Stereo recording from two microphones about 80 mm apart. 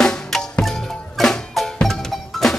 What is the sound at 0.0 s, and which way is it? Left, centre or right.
Music, centre.